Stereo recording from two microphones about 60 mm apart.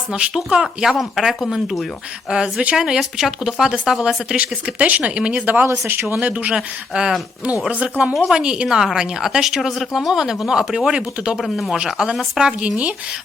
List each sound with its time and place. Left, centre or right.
0.1 s speech: centre
2.3 s speech: centre
2.7 s speech: centre
4.4 s speech: right
6.5 s speech: centre
7.7 s speech: right
8.3 s speech: centre
8.6 s speech: centre
11.4 s speech: centre
11.9 s speech: centre